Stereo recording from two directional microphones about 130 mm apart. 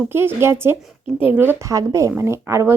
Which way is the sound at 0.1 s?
20° right (ahead or behind).